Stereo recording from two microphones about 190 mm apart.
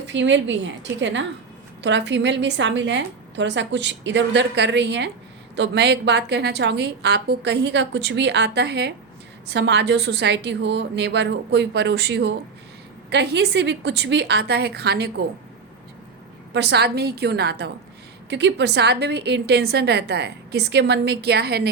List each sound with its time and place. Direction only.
0.0 s a woman's voice: 70° right (ahead or behind)
16.5 s a woman's voice: 60° right (ahead or behind)